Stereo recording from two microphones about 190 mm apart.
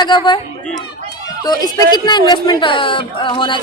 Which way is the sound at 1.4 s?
20° left (ahead or behind).